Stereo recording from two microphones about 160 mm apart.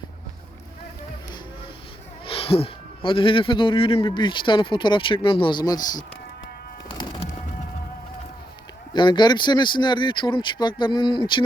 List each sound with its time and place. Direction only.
2.2 s speech: 35° left (ahead or behind)
6.9 s bird: 30° left (ahead or behind)
8.9 s speech: 30° left (ahead or behind)